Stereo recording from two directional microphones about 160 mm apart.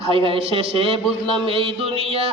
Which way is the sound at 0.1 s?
35° right (ahead or behind).